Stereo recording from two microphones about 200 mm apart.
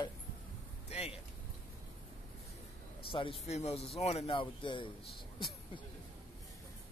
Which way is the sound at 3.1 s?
25° left (ahead or behind).